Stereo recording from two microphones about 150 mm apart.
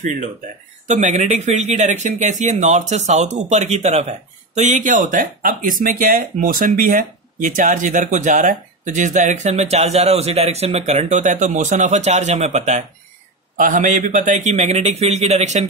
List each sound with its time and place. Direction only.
0.8 s speech: 55° right (ahead or behind)
13.6 s speech: 60° right (ahead or behind)